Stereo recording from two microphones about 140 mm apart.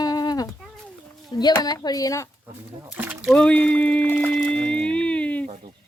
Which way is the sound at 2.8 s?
10° right (ahead or behind).